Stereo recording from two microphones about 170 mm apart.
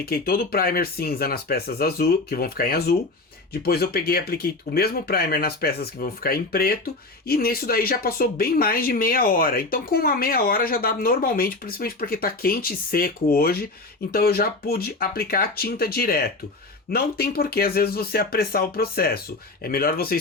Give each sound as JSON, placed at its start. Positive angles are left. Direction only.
{"t": 0.0, "sound": "speech", "side_deg": 60}